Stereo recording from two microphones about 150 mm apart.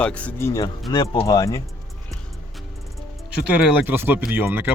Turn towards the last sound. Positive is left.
turn(degrees=-15)  # may be behind; listen again after turning